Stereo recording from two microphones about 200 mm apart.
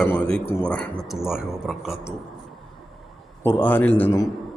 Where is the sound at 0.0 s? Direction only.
5° left (ahead or behind).